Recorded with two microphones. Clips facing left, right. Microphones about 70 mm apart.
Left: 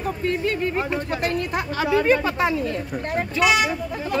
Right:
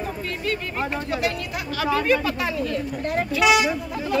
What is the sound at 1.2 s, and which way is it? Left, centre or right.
Speech, left.